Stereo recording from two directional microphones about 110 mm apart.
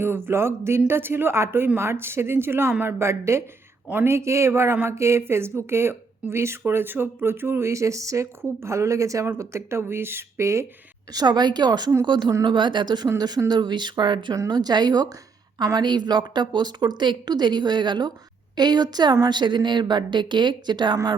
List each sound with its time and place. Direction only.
0.0 s speech: 20° right (ahead or behind)
11.1 s a woman's voice: 40° right (ahead or behind)
14.3 s a woman's voice: 35° right (ahead or behind)